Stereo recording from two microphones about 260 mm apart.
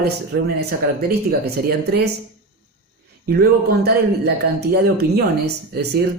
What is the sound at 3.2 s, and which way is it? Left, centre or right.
Speech, right.